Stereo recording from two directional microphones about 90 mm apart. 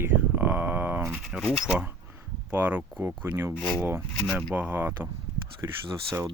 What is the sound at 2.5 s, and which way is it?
Speech, 20° right (ahead or behind).